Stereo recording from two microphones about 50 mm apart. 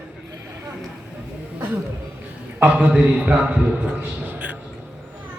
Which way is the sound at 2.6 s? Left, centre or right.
Right.